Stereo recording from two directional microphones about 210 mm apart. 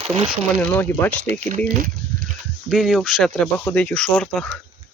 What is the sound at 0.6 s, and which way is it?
Speech, 10° left (ahead or behind).